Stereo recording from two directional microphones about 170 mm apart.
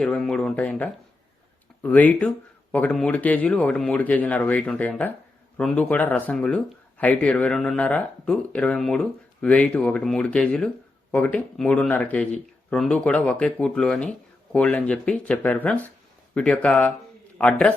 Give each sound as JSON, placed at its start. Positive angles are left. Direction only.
{"t": 0.0, "sound": "speech", "side_deg": 5}